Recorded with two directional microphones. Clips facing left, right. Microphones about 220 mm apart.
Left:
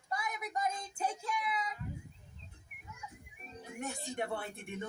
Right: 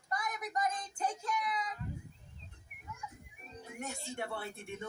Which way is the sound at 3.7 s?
15° left (ahead or behind).